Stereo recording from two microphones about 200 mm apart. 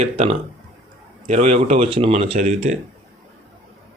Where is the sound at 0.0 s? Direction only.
35° right (ahead or behind).